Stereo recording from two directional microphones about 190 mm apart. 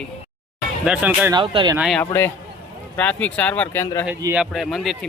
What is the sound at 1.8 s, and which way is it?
Speech, centre (ahead or behind).